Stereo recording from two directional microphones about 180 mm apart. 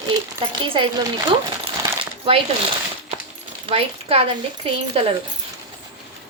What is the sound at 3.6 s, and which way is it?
Speech, 30° right (ahead or behind).